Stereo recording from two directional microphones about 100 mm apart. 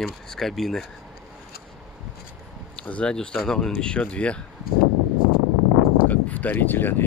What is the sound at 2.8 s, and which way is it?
Speech, 10° left (ahead or behind).